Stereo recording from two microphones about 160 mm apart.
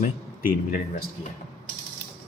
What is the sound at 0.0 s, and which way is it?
Speech, 65° left (ahead or behind).